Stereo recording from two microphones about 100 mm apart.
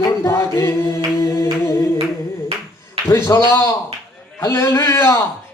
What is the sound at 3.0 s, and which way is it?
Speech, 30° left (ahead or behind).